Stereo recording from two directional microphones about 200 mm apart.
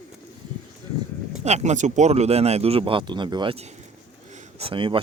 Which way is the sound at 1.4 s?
35° right (ahead or behind).